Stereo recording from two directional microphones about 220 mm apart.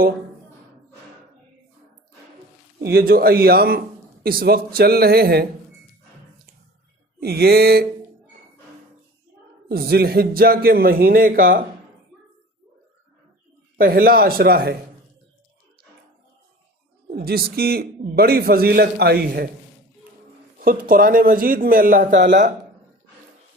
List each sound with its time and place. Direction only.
2.8 s a man's voice: 45° right (ahead or behind)
7.2 s a man's voice: 45° right (ahead or behind)
9.6 s a man's voice: 45° right (ahead or behind)
13.7 s a man's voice: 40° right (ahead or behind)
17.1 s a man's voice: 45° right (ahead or behind)
20.6 s a man's voice: 40° right (ahead or behind)